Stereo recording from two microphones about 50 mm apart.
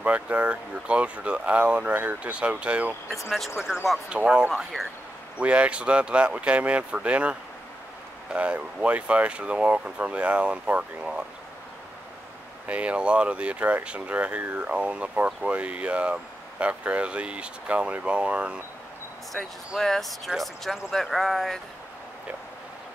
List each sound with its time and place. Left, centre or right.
0.0 s speech: right
3.3 s speech: centre
4.1 s speech: centre
4.7 s speech: centre
5.4 s speech: right
8.4 s speech: right
12.6 s speech: right
19.4 s speech: centre